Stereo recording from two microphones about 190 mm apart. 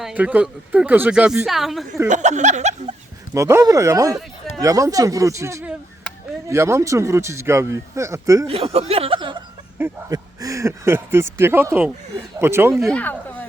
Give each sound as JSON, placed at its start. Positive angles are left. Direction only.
{"t": 0.0, "sound": "speech", "side_deg": -5}
{"t": 2.0, "sound": "speech", "side_deg": -40}
{"t": 3.3, "sound": "a man's voice", "side_deg": -15}
{"t": 8.4, "sound": "speech", "side_deg": -30}
{"t": 9.7, "sound": "a man's voice", "side_deg": -15}
{"t": 12.7, "sound": "speech", "side_deg": 5}